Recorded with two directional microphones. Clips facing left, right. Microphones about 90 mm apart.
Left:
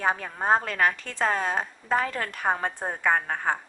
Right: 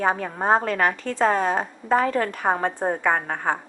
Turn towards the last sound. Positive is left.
turn(degrees=-15)  # may be behind; listen again after turning